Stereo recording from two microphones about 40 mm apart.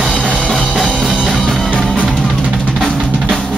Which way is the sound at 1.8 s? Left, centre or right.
Left.